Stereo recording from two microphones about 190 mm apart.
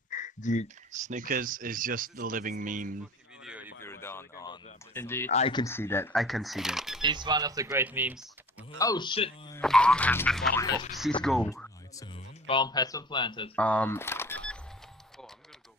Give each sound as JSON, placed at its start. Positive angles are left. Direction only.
{"t": 0.1, "sound": "a sound", "side_deg": 40}
{"t": 0.9, "sound": "speech", "side_deg": -40}
{"t": 3.4, "sound": "a sound", "side_deg": -10}
{"t": 3.8, "sound": "a sound", "side_deg": 10}
{"t": 4.9, "sound": "speech", "side_deg": 10}
{"t": 6.1, "sound": "speech", "side_deg": 0}
{"t": 7.0, "sound": "speech", "side_deg": -25}
{"t": 8.7, "sound": "speech", "side_deg": 20}
{"t": 9.6, "sound": "speech", "side_deg": 5}
{"t": 10.5, "sound": "speech", "side_deg": 20}
{"t": 11.2, "sound": "speech", "side_deg": 0}
{"t": 11.5, "sound": "speech", "side_deg": 15}
{"t": 13.6, "sound": "speech", "side_deg": 5}